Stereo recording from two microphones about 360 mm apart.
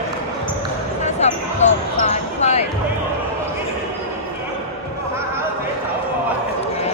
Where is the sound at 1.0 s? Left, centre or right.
Centre.